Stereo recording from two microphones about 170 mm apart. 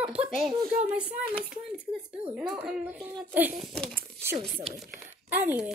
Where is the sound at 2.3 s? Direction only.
5° right (ahead or behind).